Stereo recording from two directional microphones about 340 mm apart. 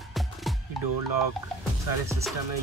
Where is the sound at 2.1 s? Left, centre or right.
Centre.